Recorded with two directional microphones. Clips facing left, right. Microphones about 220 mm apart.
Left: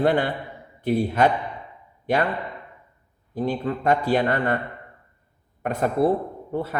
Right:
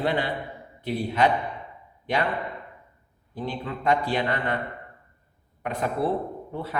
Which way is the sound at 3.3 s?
45° left (ahead or behind).